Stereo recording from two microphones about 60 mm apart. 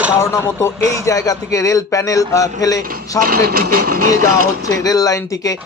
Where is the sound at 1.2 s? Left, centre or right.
Left.